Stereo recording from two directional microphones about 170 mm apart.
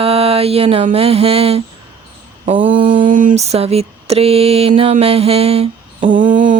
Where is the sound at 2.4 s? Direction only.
30° right (ahead or behind).